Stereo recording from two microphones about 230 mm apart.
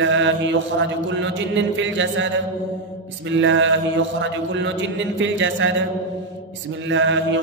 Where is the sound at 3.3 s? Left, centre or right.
Right.